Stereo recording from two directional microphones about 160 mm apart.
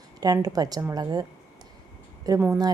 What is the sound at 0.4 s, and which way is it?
A woman's voice, 25° right (ahead or behind).